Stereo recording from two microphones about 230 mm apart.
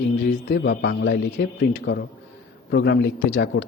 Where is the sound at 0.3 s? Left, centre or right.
Left.